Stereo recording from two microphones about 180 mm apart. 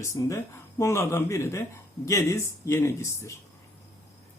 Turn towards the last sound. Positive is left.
turn(degrees=15)  # may be behind; listen again after turning